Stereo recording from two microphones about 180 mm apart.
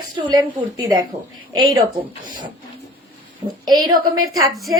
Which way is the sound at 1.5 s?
25° right (ahead or behind).